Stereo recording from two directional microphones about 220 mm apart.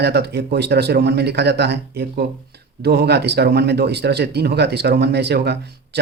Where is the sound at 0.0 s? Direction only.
50° right (ahead or behind).